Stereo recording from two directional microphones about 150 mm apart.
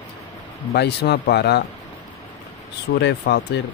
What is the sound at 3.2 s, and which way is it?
Speech, 65° left (ahead or behind).